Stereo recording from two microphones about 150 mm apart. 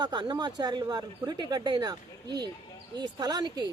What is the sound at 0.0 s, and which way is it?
Speech, 30° right (ahead or behind).